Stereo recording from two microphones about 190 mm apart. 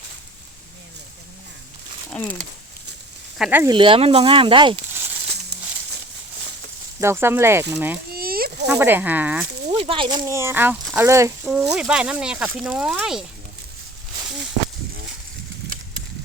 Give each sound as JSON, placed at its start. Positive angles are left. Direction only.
{"t": 2.0, "sound": "a sound", "side_deg": 5}
{"t": 3.3, "sound": "speech", "side_deg": -5}
{"t": 3.6, "sound": "speech", "side_deg": -25}
{"t": 7.0, "sound": "speech", "side_deg": -15}
{"t": 8.1, "sound": "a sound", "side_deg": -50}
{"t": 8.6, "sound": "speech", "side_deg": -15}
{"t": 9.6, "sound": "speech", "side_deg": -30}
{"t": 11.4, "sound": "speech", "side_deg": -5}